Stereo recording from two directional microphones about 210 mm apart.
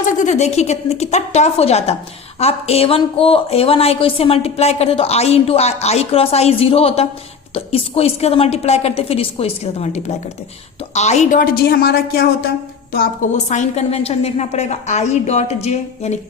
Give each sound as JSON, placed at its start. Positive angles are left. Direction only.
{"t": 0.0, "sound": "a woman's voice", "side_deg": 35}